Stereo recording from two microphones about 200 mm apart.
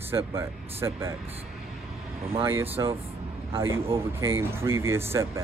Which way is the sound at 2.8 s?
20° right (ahead or behind).